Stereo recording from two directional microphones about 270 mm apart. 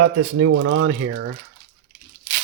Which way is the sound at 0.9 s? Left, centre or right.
Right.